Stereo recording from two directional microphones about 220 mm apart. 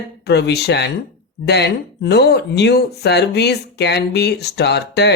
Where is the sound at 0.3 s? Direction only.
50° left (ahead or behind).